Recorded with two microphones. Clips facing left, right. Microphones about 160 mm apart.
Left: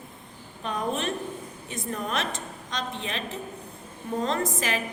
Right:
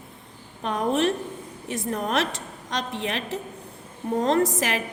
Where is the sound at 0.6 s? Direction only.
80° right.